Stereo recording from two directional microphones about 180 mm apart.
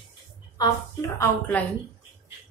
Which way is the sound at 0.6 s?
15° left (ahead or behind).